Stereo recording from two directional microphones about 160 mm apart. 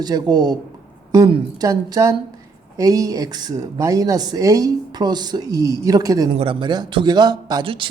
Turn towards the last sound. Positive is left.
turn(degrees=-30)  # may be behind; listen again after turning